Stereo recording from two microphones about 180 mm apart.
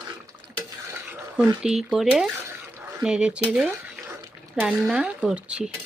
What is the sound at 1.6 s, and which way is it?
Speech, 5° right (ahead or behind).